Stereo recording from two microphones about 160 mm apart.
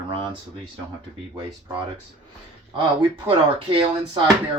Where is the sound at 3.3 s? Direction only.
30° right (ahead or behind).